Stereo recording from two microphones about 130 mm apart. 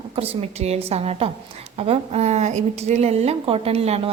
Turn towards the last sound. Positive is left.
turn(degrees=-50)  # may be behind; listen again after turning